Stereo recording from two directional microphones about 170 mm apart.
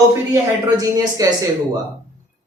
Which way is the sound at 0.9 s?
20° right (ahead or behind).